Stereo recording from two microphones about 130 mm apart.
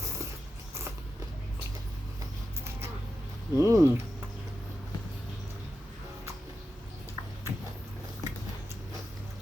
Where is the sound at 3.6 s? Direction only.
25° right (ahead or behind).